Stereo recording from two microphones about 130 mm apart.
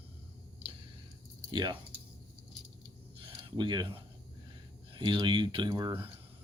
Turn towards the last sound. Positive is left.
turn(degrees=-35)  # may be behind; listen again after turning